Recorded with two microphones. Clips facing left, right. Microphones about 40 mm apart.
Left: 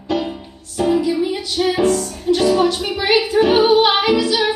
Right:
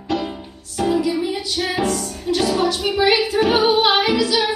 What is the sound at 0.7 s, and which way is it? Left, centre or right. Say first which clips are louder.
Music: left 2 dB; centre.